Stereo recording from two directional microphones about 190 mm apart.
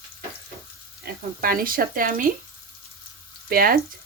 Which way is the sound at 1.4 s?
50° right (ahead or behind).